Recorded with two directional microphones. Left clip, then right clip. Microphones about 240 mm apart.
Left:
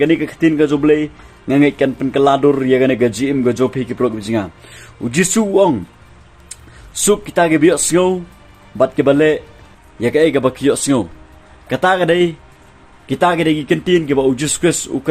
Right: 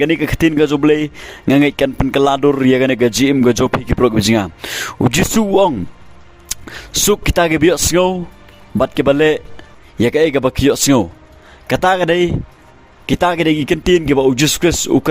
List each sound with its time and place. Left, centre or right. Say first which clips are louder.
0.0 s speech: even; right